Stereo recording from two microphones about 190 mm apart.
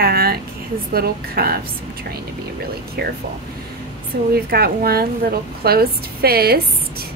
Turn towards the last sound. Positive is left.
turn(degrees=-55)  # may be behind; listen again after turning